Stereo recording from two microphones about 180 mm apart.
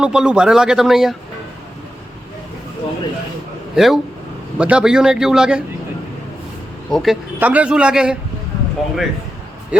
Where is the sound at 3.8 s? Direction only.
5° right (ahead or behind).